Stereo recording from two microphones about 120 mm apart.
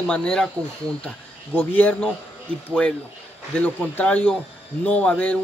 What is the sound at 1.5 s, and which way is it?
Speech, 15° left (ahead or behind).